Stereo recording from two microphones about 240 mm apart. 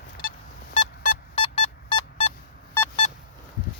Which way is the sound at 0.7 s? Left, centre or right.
Left.